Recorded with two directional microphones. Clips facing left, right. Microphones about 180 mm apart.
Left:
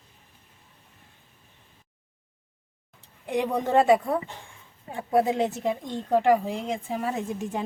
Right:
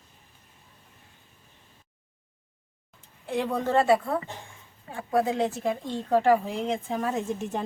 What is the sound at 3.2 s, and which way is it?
Speech, 15° left (ahead or behind).